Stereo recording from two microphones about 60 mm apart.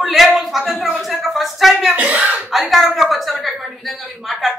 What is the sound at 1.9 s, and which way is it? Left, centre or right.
Speech, right.